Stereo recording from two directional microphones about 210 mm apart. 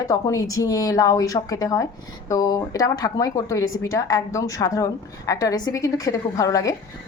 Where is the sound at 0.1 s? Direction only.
15° left (ahead or behind).